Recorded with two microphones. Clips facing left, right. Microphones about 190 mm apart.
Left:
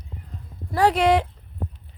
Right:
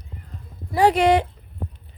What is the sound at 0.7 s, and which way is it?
Speech, centre (ahead or behind).